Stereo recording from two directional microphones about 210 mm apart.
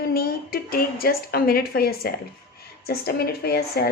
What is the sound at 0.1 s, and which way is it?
Speech, 45° left (ahead or behind).